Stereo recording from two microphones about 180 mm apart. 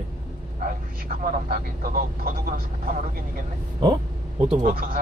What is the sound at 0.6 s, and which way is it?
Speech, 50° right (ahead or behind).